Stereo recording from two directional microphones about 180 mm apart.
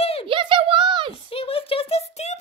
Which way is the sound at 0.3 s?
30° right (ahead or behind).